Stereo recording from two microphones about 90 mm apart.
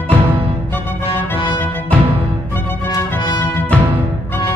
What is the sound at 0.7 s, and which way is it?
Music, 25° left (ahead or behind).